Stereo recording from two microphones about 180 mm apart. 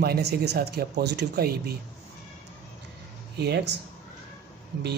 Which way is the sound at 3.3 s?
65° right (ahead or behind).